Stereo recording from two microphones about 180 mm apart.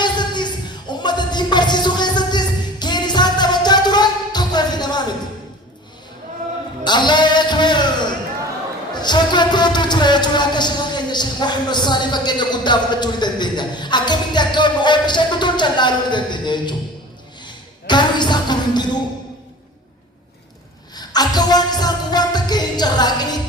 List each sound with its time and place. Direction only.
0.0 s music: 25° left (ahead or behind)
6.8 s music: 25° left (ahead or behind)
17.4 s a sound: 25° left (ahead or behind)
20.9 s music: 20° left (ahead or behind)